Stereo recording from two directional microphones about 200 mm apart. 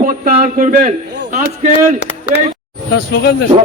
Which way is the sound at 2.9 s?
55° left (ahead or behind).